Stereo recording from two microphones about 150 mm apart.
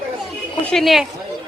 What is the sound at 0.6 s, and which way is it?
Speech, centre (ahead or behind).